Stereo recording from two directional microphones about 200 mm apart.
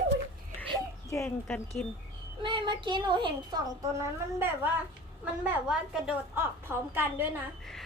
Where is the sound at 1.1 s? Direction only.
10° left (ahead or behind).